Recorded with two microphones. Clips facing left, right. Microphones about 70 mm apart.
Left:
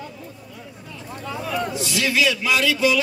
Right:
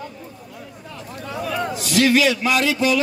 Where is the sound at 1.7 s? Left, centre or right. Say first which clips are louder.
Right 6 dB; right.